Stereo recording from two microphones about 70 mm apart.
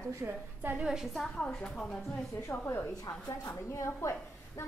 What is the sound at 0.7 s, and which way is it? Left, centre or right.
Speech, centre.